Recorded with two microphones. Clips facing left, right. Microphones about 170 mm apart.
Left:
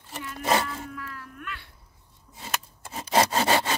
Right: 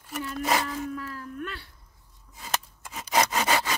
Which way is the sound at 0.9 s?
35° right (ahead or behind).